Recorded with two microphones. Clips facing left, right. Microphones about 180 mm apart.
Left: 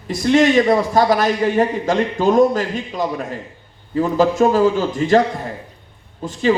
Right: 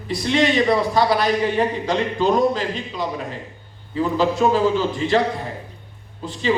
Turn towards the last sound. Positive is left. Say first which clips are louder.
# left 3 dB
turn(degrees=45)  # may be behind; listen again after turning